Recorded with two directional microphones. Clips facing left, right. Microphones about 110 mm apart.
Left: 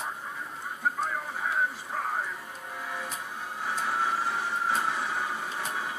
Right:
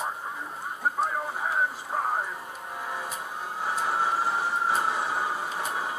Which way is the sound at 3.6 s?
30° right (ahead or behind).